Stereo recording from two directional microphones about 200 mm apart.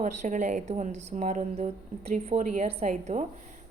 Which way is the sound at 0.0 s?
35° right (ahead or behind).